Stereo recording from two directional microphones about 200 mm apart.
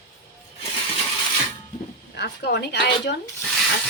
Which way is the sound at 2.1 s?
55° left (ahead or behind).